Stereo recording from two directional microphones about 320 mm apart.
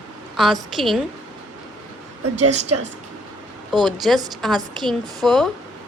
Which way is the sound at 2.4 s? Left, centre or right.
Right.